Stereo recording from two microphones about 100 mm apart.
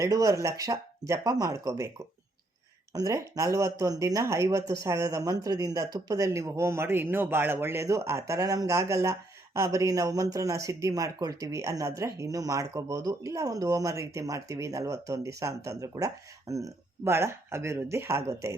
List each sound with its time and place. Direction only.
0.0 s speech: 35° right (ahead or behind)
2.9 s speech: 35° right (ahead or behind)